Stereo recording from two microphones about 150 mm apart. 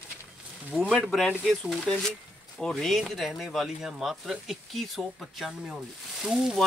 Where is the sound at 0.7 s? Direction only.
5° left (ahead or behind).